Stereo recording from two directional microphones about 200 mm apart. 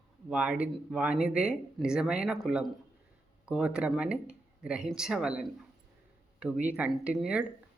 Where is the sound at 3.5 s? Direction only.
5° right (ahead or behind).